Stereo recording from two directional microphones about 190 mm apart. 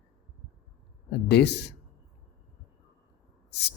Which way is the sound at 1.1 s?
60° left (ahead or behind).